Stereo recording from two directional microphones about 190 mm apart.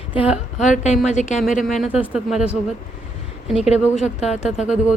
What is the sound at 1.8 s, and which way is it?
Speech, 5° right (ahead or behind).